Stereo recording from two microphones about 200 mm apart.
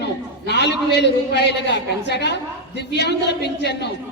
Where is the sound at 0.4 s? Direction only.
60° left (ahead or behind).